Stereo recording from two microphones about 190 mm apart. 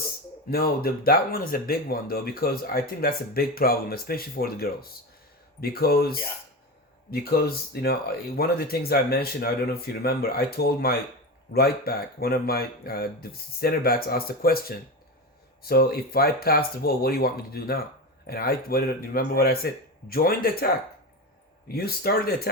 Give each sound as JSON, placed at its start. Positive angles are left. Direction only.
{"t": 0.5, "sound": "speech", "side_deg": 55}
{"t": 21.7, "sound": "speech", "side_deg": 55}